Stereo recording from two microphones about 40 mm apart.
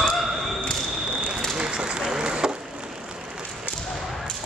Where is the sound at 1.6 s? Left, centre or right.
Right.